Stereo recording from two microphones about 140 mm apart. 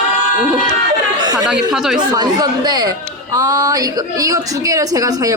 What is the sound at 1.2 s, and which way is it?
Chatter, 30° right (ahead or behind).